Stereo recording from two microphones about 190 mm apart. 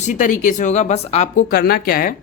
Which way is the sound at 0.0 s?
45° left (ahead or behind).